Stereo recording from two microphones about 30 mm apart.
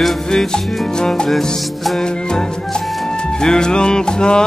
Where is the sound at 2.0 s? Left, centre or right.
Left.